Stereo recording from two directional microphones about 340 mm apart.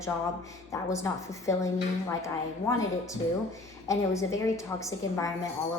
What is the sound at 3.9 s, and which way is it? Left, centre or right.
A woman's voice, centre.